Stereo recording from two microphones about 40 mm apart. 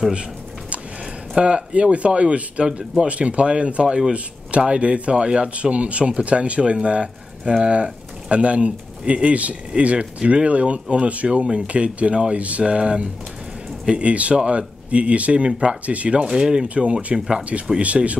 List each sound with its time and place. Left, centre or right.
0.1 s a sound: right
1.3 s speech: right
3.8 s speech: centre
4.1 s speech: right
16.2 s speech: centre
16.6 s speech: right